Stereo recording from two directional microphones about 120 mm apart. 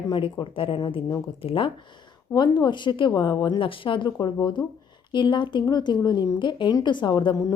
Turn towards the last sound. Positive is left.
turn(degrees=30)  # may be behind; listen again after turning